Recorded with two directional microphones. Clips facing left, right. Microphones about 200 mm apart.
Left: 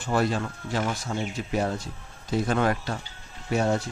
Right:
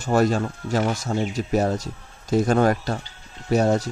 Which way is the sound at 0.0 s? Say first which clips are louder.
Right 5 dB; 45° right (ahead or behind).